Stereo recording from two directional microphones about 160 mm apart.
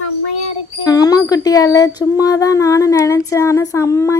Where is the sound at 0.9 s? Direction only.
25° left (ahead or behind).